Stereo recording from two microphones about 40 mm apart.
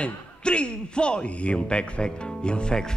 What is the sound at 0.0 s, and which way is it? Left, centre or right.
A man's voice, left.